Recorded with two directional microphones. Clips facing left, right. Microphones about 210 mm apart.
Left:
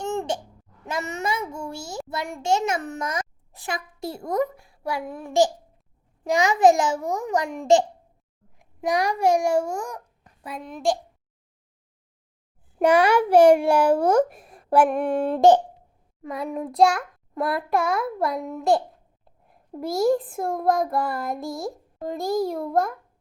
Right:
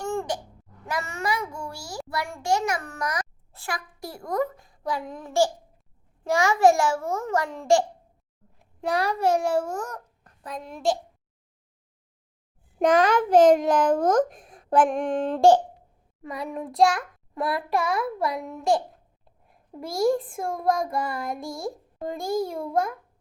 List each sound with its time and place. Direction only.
0.0 s babbling: 20° left (ahead or behind)
0.9 s a child's voice: 20° left (ahead or behind)
4.5 s a child's voice: 10° left (ahead or behind)
12.8 s a child's voice: 10° left (ahead or behind)
15.4 s a child's voice: 20° left (ahead or behind)
16.3 s a child's voice: centre (ahead or behind)
19.8 s a child's voice: centre (ahead or behind)
20.5 s child singing: 55° left (ahead or behind)
20.8 s a child's voice: centre (ahead or behind)